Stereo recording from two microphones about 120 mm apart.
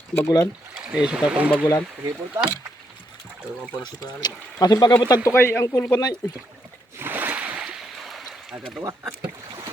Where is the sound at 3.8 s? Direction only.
35° left (ahead or behind).